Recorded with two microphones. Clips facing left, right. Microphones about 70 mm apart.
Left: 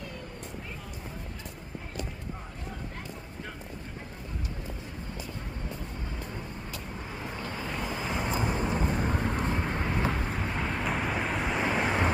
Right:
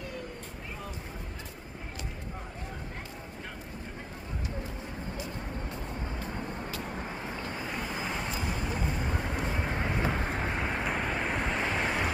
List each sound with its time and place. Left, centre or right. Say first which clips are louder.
7.3 s vehicle: even; right
7.6 s vehicle: left 3 dB; centre
8.4 s vehicle: left 4 dB; left
9.2 s vehicle: left 3 dB; centre
9.6 s vehicle: left 1 dB; centre
10.6 s vehicle: even; centre
10.8 s vehicle: left 1 dB; centre
11.6 s vehicle: left 3 dB; centre